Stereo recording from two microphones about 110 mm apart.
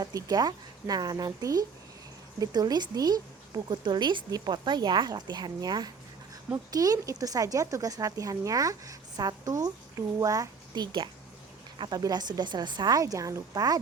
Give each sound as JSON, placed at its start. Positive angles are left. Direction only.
{"t": 0.0, "sound": "a woman's voice", "side_deg": -35}